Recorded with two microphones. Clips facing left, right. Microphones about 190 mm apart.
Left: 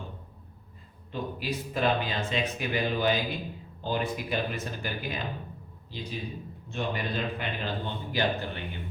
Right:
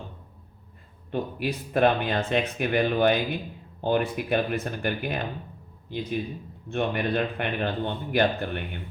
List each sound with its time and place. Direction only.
1.1 s speech: 55° right (ahead or behind)